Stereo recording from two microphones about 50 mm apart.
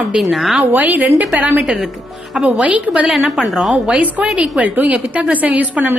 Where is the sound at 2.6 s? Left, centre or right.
Right.